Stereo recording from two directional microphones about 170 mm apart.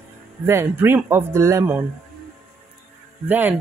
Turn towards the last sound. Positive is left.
turn(degrees=-10)  # may be behind; listen again after turning